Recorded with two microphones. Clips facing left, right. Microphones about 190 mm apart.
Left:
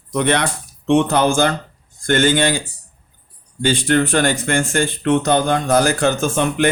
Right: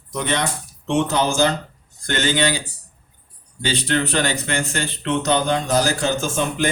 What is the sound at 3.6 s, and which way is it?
Speech, 50° left (ahead or behind).